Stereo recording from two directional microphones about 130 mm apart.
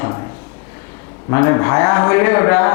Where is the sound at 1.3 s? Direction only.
25° left (ahead or behind).